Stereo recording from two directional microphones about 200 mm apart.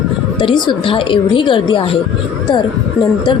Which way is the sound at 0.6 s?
25° left (ahead or behind).